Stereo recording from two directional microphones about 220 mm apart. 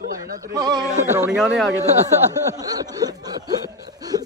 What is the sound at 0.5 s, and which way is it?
Speech, 20° right (ahead or behind).